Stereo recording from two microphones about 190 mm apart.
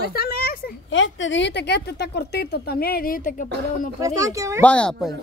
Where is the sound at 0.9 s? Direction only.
80° left; by 3.4 s 45° left (ahead or behind).